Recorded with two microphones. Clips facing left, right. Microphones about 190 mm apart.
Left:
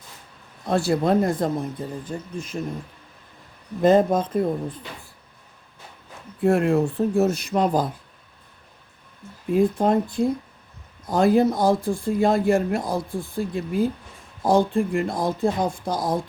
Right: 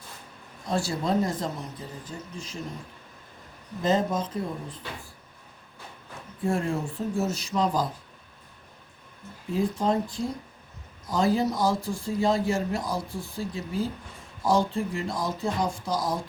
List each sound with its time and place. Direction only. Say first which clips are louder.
0.6 s speech: left 7 dB; 60° left (ahead or behind)
3.8 s speech: left 8 dB; 55° left (ahead or behind)
6.4 s speech: left 8 dB; 65° left (ahead or behind)
9.5 s speech: left 6 dB; 55° left (ahead or behind)